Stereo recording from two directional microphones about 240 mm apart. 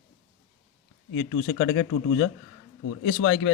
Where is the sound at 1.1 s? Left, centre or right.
Left.